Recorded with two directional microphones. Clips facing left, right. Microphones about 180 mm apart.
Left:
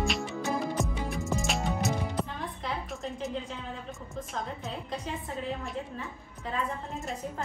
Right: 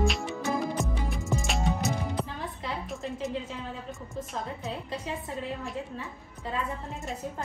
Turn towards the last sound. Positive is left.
turn(degrees=0)  # may be behind; listen again after turning